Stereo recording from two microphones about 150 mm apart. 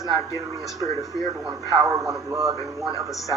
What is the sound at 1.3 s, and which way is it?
Speech, 20° right (ahead or behind).